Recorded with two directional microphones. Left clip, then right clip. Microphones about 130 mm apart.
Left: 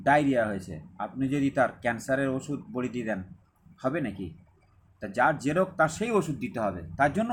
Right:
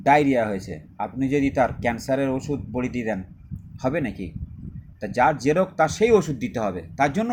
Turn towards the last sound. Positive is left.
turn(degrees=-35)  # may be behind; listen again after turning